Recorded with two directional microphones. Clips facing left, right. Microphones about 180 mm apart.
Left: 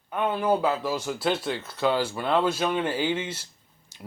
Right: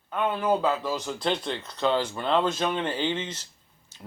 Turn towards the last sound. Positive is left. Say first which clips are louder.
# left 2 dB
turn(degrees=15)  # may be behind; listen again after turning